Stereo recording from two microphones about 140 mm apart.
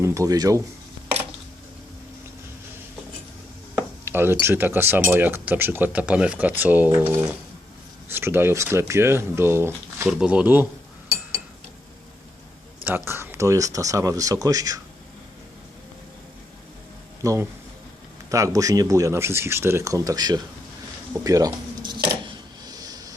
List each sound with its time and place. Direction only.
0.0 s speech: 20° right (ahead or behind)
3.8 s speech: 15° right (ahead or behind)
10.1 s speech: 5° right (ahead or behind)
13.1 s speech: 15° right (ahead or behind)
17.2 s speech: 25° right (ahead or behind)
21.1 s a sound: 25° right (ahead or behind)